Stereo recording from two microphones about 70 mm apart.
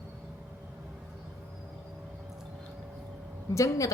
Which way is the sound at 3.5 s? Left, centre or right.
Left.